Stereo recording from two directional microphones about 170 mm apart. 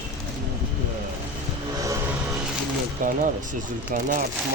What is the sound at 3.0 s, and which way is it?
Speech, 50° right (ahead or behind).